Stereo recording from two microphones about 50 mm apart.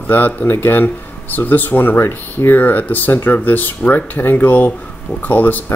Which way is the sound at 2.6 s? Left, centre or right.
Left.